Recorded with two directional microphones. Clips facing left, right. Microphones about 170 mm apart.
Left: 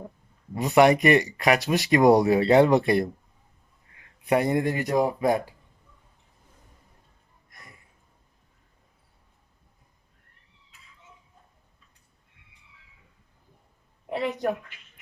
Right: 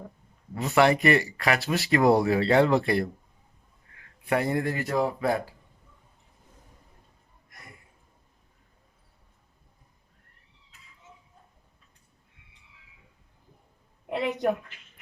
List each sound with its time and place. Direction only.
0.5 s speech: 15° left (ahead or behind)
4.3 s speech: 20° left (ahead or behind)